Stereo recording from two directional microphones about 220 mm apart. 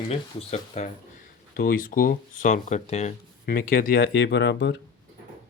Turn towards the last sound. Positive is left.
turn(degrees=55)  # may be behind; listen again after turning